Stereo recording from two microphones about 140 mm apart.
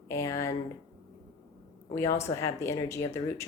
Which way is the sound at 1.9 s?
20° left (ahead or behind).